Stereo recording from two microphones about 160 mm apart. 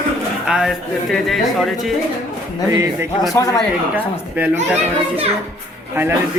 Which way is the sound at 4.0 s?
10° right (ahead or behind).